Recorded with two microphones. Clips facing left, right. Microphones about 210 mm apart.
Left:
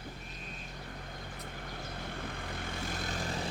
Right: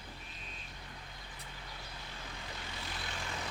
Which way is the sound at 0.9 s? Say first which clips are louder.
Left 7 dB; 50° left (ahead or behind).